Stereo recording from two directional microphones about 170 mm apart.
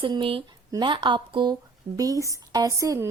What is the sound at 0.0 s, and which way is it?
A woman's voice, 30° right (ahead or behind).